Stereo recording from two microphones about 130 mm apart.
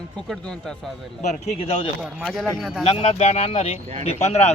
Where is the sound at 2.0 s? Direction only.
Centre (ahead or behind).